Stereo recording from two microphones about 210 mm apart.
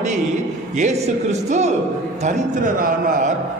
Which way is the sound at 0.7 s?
35° right (ahead or behind).